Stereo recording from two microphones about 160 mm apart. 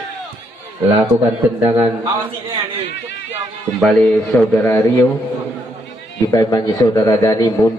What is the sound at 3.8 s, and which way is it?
A man's voice, 5° left (ahead or behind).